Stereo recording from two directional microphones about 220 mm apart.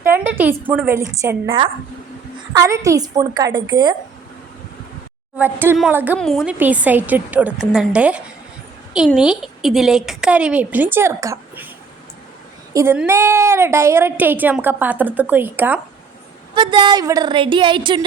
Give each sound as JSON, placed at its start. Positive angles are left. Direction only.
{"t": 0.0, "sound": "a woman's voice", "side_deg": -10}
{"t": 1.5, "sound": "a woman's voice", "side_deg": -25}
{"t": 5.4, "sound": "a woman's voice", "side_deg": -10}
{"t": 12.7, "sound": "a woman's voice", "side_deg": -10}
{"t": 16.6, "sound": "a woman's voice", "side_deg": -20}